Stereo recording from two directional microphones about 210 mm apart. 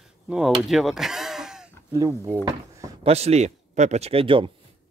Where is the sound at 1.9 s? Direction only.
15° right (ahead or behind).